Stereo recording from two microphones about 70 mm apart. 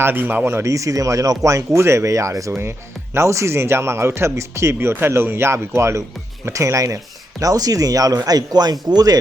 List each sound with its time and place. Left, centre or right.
0.0 s speech: right